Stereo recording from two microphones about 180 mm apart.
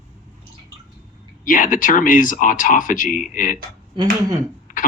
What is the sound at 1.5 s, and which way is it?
Speech, 45° left (ahead or behind).